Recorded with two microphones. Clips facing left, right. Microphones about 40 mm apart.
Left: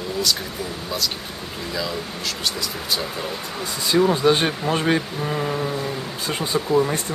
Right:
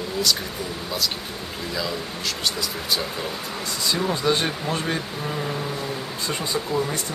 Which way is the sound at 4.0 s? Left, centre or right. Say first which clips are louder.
Left 7 dB; centre.